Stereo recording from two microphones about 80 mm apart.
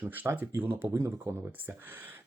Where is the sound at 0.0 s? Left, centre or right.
Right.